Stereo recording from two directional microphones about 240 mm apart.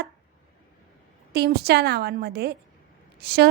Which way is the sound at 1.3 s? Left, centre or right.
Right.